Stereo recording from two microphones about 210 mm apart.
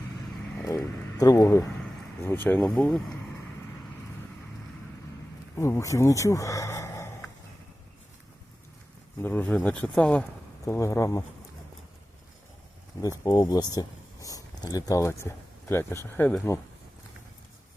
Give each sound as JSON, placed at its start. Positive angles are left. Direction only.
{"t": 0.5, "sound": "speech", "side_deg": 10}
{"t": 5.5, "sound": "speech", "side_deg": 15}
{"t": 9.2, "sound": "speech", "side_deg": 10}
{"t": 13.0, "sound": "speech", "side_deg": 20}